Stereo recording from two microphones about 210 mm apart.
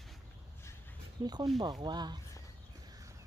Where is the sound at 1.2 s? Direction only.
20° right (ahead or behind).